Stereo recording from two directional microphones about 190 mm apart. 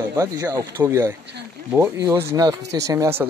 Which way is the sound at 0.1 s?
15° right (ahead or behind).